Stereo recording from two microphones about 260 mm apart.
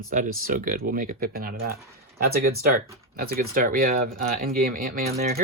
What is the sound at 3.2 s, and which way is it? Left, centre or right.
Speech, right.